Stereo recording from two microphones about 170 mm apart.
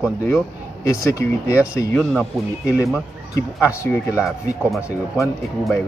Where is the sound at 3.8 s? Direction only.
15° left (ahead or behind).